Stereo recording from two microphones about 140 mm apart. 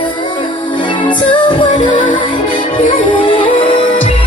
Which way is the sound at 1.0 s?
35° left (ahead or behind).